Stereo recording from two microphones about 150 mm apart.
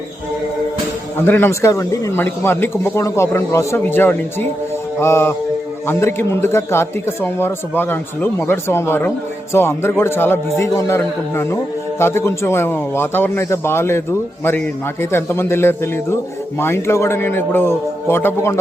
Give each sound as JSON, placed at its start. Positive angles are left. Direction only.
{"t": 1.2, "sound": "speech", "side_deg": 15}